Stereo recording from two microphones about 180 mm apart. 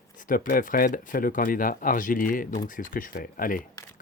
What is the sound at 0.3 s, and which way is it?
Speech, 50° left (ahead or behind).